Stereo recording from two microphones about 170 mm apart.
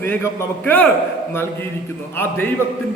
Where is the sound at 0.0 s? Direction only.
10° left (ahead or behind).